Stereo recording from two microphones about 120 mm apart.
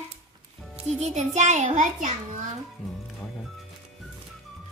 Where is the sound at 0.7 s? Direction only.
65° right (ahead or behind); by 2.1 s 90° right.